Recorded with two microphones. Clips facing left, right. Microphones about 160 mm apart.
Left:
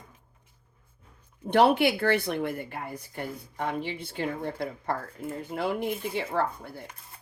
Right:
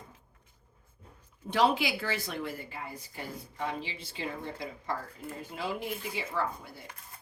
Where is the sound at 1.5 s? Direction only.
60° left (ahead or behind).